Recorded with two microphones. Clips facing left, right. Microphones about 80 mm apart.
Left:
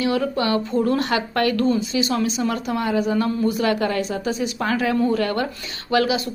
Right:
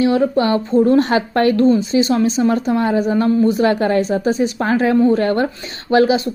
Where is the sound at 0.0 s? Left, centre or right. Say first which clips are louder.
Right 6 dB; right.